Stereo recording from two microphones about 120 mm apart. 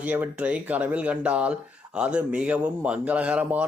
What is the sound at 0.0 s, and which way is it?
Speech, 10° right (ahead or behind).